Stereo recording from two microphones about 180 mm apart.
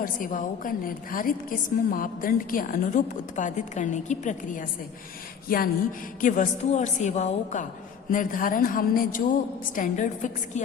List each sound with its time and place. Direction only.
0.0 s a woman's voice: 50° left (ahead or behind)
5.5 s a sound: 55° left (ahead or behind)
6.2 s a woman's voice: 45° left (ahead or behind)